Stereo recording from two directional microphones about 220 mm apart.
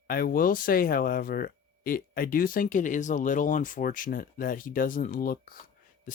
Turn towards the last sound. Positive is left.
turn(degrees=40)  # may be behind; listen again after turning